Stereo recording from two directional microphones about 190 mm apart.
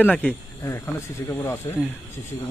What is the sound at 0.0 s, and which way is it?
Speech, 10° left (ahead or behind).